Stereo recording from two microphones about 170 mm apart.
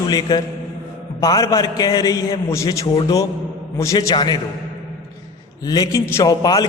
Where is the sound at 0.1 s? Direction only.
25° left (ahead or behind).